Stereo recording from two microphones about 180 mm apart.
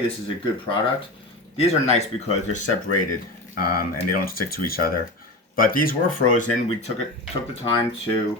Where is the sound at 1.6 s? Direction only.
35° left (ahead or behind).